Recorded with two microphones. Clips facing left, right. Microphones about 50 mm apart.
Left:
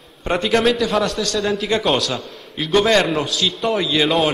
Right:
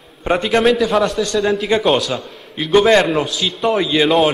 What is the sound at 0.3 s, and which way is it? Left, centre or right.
A man's voice, centre.